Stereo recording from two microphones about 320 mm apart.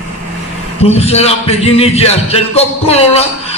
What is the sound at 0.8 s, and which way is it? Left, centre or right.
Speech, centre.